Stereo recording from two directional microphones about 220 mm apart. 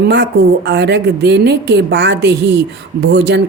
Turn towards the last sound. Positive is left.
turn(degrees=-45)  # may be behind; listen again after turning